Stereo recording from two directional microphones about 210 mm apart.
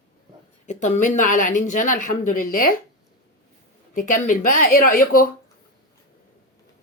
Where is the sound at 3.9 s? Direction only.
35° left (ahead or behind).